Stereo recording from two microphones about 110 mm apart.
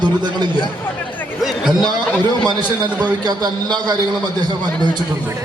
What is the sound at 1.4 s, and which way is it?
A man's voice, centre (ahead or behind).